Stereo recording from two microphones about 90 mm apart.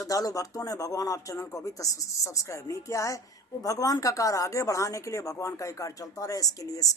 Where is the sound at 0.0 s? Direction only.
40° left (ahead or behind).